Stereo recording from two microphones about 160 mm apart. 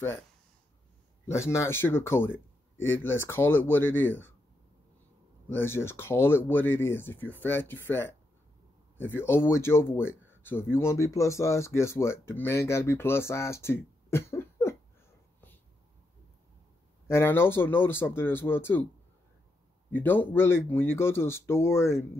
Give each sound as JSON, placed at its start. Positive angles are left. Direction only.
{"t": 1.2, "sound": "speech", "side_deg": 15}
{"t": 5.5, "sound": "speech", "side_deg": 15}
{"t": 17.1, "sound": "speech", "side_deg": 15}
{"t": 19.9, "sound": "speech", "side_deg": 10}